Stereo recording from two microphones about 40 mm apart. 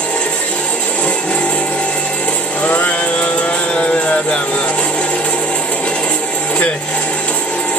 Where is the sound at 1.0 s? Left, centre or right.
Left.